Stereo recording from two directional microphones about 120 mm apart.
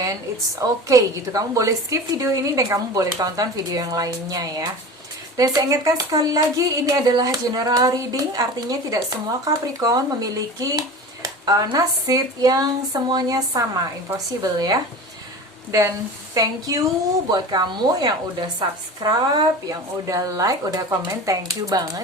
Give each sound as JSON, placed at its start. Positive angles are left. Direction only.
{"t": 0.6, "sound": "a woman's voice", "side_deg": -25}
{"t": 16.3, "sound": "a woman's voice", "side_deg": -30}